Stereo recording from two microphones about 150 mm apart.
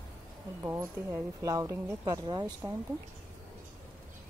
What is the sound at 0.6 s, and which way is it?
Speech, 20° right (ahead or behind).